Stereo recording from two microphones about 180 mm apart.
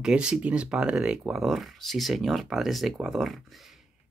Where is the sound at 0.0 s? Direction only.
5° right (ahead or behind).